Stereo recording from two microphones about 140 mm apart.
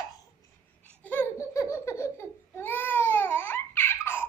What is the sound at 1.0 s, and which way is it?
Babbling, 15° left (ahead or behind).